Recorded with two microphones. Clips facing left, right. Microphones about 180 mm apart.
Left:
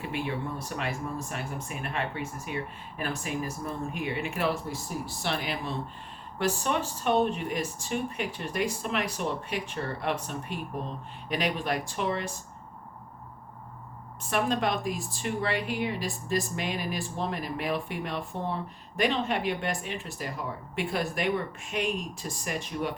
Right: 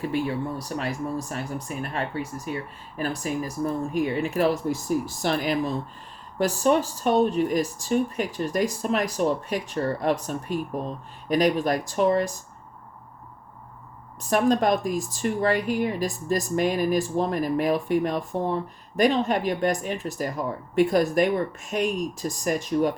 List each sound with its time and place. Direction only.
0.0 s speech: 40° right (ahead or behind)
14.2 s a woman's voice: 40° right (ahead or behind)